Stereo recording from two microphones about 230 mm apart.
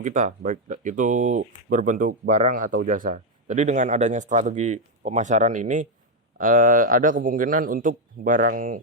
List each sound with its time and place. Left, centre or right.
0.0 s speech: right